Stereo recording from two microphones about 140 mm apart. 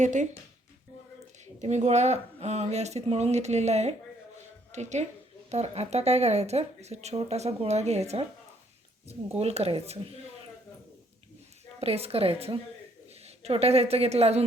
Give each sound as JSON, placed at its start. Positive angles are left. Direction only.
{"t": 0.0, "sound": "speech", "side_deg": -60}
{"t": 1.5, "sound": "a woman's voice", "side_deg": -55}
{"t": 9.4, "sound": "speech", "side_deg": -45}
{"t": 11.8, "sound": "speech", "side_deg": -45}